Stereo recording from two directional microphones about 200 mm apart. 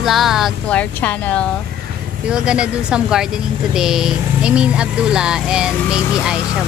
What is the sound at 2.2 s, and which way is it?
Speech, 5° right (ahead or behind).